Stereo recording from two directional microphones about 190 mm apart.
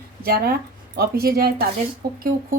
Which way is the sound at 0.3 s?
55° right (ahead or behind).